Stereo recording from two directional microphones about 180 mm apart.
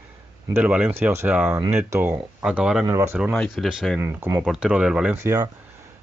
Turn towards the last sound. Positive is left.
turn(degrees=-20)  # may be behind; listen again after turning